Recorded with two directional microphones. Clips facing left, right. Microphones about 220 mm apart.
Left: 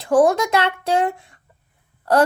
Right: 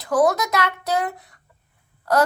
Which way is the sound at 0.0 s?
30° left (ahead or behind).